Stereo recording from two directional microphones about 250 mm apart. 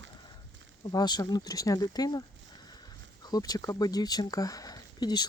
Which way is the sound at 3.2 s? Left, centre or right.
Centre.